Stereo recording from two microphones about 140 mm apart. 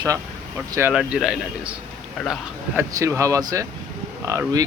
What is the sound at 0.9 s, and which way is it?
Speech, 5° right (ahead or behind).